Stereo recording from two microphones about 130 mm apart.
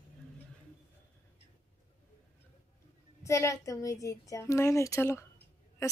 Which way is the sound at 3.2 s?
25° left (ahead or behind).